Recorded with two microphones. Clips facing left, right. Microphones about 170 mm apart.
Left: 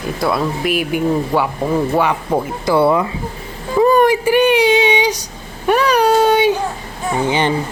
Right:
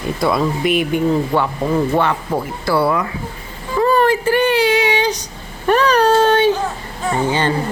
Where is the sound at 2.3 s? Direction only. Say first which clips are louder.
Left 3 dB; 20° left (ahead or behind).